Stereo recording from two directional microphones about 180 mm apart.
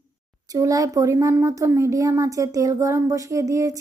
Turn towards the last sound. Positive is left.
turn(degrees=-20)  # may be behind; listen again after turning